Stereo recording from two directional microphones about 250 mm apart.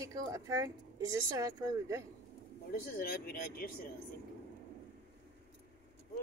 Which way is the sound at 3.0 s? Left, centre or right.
Left.